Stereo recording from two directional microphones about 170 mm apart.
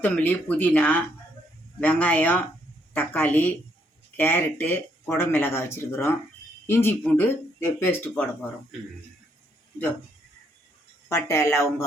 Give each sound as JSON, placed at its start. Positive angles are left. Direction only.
{"t": 0.0, "sound": "speech", "side_deg": 10}
{"t": 11.1, "sound": "speech", "side_deg": 15}